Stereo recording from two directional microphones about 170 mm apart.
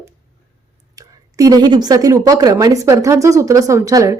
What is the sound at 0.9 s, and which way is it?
A woman's voice, 20° right (ahead or behind).